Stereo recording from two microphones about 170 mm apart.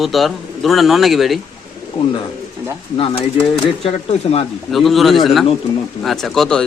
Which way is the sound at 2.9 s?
30° left (ahead or behind).